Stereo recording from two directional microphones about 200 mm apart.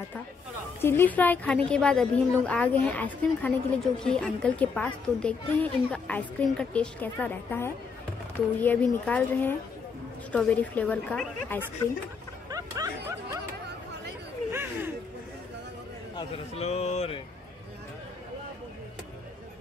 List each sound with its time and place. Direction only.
0.7 s a woman's voice: 10° left (ahead or behind)
12.4 s music: 15° right (ahead or behind)
14.5 s a sound: 10° right (ahead or behind)
16.2 s speech: 30° left (ahead or behind)